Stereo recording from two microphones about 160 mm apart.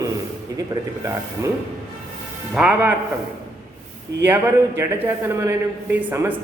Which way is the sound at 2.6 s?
10° right (ahead or behind).